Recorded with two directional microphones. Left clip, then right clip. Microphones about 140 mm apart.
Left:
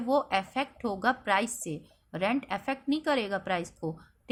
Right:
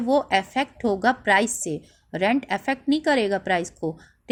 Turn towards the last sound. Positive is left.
turn(degrees=-45)  # may be behind; listen again after turning